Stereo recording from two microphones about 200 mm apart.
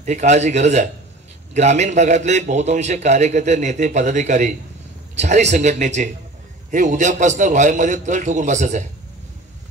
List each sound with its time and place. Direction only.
0.0 s a man's voice: 35° right (ahead or behind)